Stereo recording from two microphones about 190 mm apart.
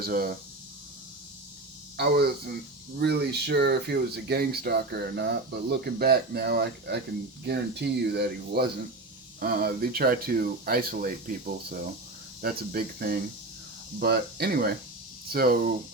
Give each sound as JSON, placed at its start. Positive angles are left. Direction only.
{"t": 0.0, "sound": "speech", "side_deg": -50}
{"t": 2.0, "sound": "speech", "side_deg": -55}